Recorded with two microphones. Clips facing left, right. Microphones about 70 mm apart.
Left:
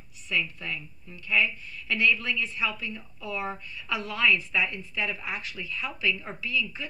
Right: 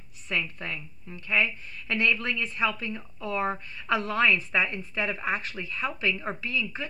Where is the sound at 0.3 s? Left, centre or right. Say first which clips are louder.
Even; right.